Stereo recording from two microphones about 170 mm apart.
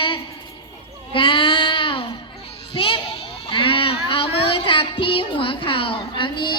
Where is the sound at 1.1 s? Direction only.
30° left (ahead or behind).